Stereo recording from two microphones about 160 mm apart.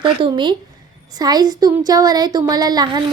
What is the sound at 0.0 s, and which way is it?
Speech, 30° right (ahead or behind).